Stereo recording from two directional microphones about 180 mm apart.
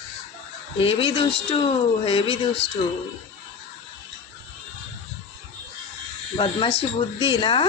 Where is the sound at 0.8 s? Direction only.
30° left (ahead or behind).